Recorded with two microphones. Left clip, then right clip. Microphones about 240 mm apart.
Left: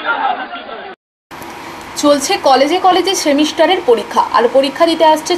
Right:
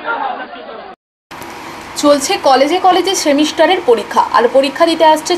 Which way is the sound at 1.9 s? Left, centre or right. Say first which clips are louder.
Right 1 dB; centre.